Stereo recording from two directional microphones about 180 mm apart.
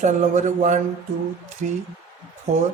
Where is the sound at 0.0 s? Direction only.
40° right (ahead or behind).